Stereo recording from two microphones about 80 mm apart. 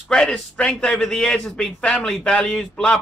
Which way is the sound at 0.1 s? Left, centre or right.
Centre.